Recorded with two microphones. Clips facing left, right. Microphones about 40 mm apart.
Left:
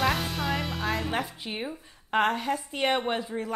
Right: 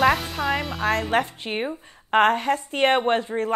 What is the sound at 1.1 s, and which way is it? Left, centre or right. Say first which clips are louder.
Speech: right 8 dB; right.